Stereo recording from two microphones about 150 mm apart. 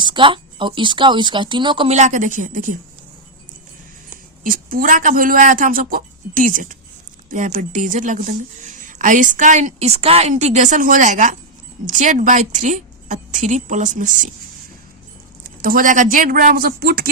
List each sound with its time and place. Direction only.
0.0 s speech: 30° right (ahead or behind)
1.9 s a woman's voice: 50° right (ahead or behind)
4.4 s a woman's voice: 70° right (ahead or behind)
15.6 s speech: 65° right (ahead or behind); by 17.1 s 85° right